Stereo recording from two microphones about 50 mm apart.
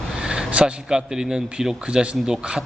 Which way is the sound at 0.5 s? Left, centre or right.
Centre.